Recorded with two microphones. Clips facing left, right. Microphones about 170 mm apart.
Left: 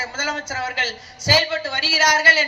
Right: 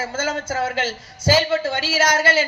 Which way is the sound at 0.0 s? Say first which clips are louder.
Right 4 dB; 50° right (ahead or behind).